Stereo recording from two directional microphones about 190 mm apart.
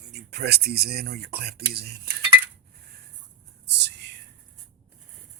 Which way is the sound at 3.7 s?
65° right (ahead or behind).